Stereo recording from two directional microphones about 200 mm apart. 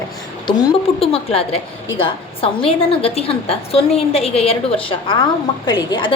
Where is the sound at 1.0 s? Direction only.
30° left (ahead or behind).